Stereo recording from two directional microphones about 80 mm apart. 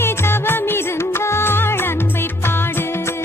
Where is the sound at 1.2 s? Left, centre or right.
Left.